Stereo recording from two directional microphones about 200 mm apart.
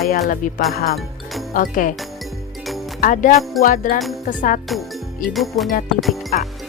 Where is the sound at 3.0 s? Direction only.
40° left (ahead or behind).